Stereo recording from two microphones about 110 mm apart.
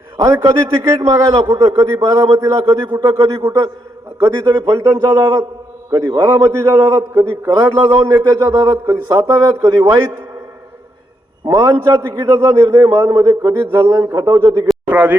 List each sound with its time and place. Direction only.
0.2 s a man's voice: 30° right (ahead or behind)
11.4 s a man's voice: 30° right (ahead or behind)